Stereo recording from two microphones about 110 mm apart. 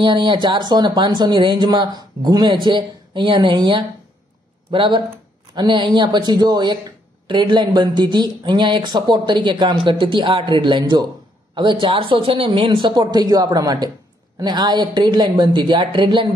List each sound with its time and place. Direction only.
0.0 s speech: 45° right (ahead or behind)